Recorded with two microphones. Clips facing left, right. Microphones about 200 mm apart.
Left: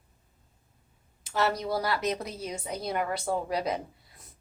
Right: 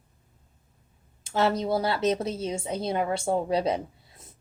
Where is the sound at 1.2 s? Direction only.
25° right (ahead or behind).